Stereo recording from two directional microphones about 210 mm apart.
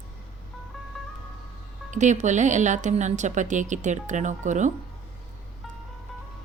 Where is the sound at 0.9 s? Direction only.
Centre (ahead or behind).